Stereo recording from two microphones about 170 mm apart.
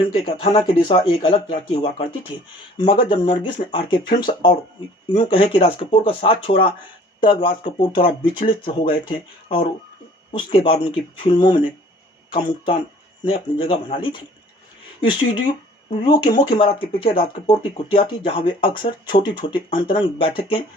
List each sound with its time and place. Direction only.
0.0 s speech: 30° left (ahead or behind)